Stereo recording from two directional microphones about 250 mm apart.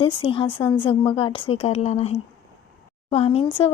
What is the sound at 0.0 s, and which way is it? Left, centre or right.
A woman's voice, centre.